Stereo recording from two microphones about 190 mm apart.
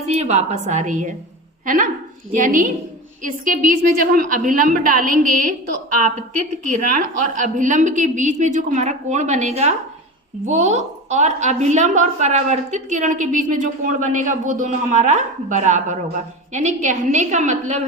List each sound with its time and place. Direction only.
0.1 s a woman's voice: 35° right (ahead or behind)